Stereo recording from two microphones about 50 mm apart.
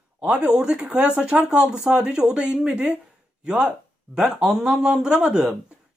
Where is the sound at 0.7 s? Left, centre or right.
Right; by 5.4 s centre.